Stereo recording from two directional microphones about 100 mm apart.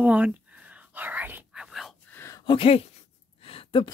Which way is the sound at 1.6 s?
Centre (ahead or behind).